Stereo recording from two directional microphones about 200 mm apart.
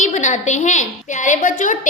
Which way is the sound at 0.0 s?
40° left (ahead or behind).